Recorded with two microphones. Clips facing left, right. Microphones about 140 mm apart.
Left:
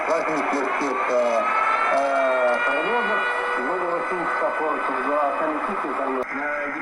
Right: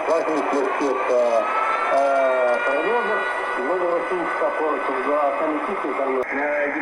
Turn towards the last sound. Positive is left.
turn(degrees=-55)  # may be behind; listen again after turning